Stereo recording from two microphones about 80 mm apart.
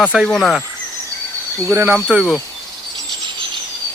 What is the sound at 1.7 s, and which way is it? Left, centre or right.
Speech, right.